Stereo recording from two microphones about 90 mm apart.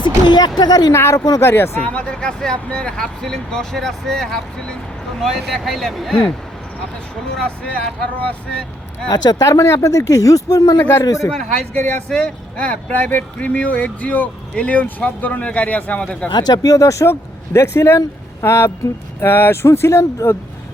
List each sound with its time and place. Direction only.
0.3 s speech: 50° left (ahead or behind)
0.9 s speech: 30° left (ahead or behind)
1.8 s speech: 15° left (ahead or behind)
7.3 s speech: 10° left (ahead or behind)
9.0 s speech: 50° left (ahead or behind)
10.8 s speech: 25° left (ahead or behind)
11.0 s speech: 35° left (ahead or behind)
11.3 s speech: 5° left (ahead or behind)
16.3 s speech: 50° left (ahead or behind); by 20.3 s 30° left (ahead or behind)